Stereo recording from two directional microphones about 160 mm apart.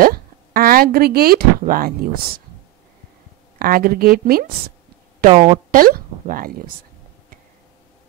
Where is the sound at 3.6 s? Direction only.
65° right (ahead or behind).